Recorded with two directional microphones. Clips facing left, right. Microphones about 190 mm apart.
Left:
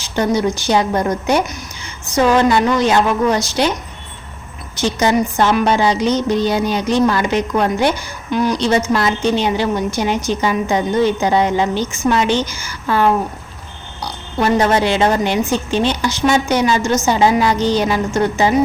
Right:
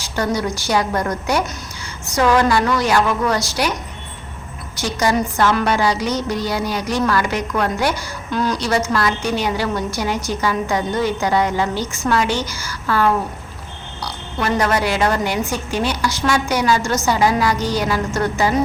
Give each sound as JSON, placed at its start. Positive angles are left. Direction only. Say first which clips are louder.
{"t": 0.0, "sound": "a woman's voice", "louder": "left 4 dB", "side_deg": 20}
{"t": 4.8, "sound": "a woman's voice", "louder": "left 3 dB", "side_deg": 20}